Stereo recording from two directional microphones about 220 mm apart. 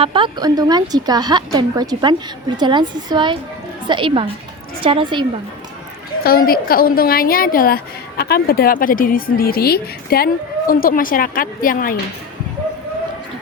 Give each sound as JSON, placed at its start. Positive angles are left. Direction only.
{"t": 0.0, "sound": "a woman's voice", "side_deg": -20}
{"t": 6.2, "sound": "a woman's voice", "side_deg": 40}